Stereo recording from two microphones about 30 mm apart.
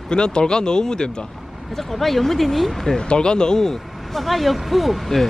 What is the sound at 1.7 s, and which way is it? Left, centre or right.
Speech, centre.